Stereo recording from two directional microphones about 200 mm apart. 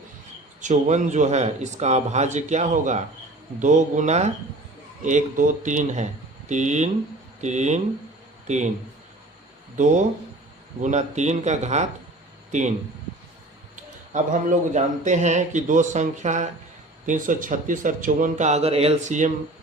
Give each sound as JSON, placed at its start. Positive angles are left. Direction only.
{"t": 0.6, "sound": "speech", "side_deg": -35}
{"t": 9.7, "sound": "speech", "side_deg": -40}
{"t": 14.7, "sound": "speech", "side_deg": -35}